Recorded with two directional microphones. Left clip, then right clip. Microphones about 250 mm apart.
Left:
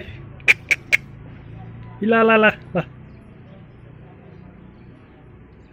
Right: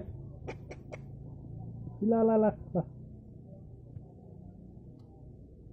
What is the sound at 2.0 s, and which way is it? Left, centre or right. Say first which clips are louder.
Speech: left 12 dB; left.